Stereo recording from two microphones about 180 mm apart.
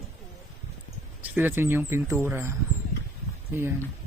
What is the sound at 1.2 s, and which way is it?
Speech, 10° right (ahead or behind).